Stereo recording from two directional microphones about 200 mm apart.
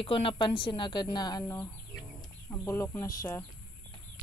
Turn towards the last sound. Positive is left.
turn(degrees=15)  # may be behind; listen again after turning